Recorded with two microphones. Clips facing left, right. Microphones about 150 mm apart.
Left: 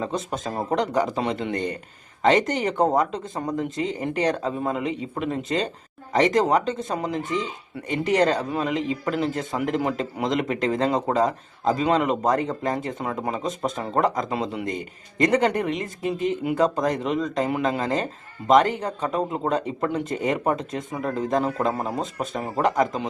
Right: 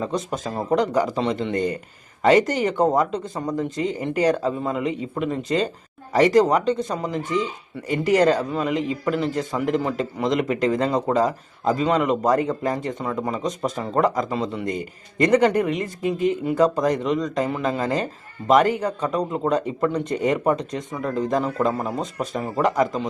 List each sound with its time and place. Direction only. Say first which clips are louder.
0.1 s speech: right 2 dB; centre (ahead or behind)
21.7 s speech: right 1 dB; 30° left (ahead or behind)
22.0 s speech: right 2 dB; centre (ahead or behind)